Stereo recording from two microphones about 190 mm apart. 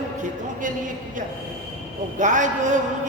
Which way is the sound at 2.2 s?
40° right (ahead or behind).